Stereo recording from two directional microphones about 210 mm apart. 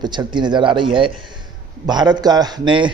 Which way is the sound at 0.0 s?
20° right (ahead or behind).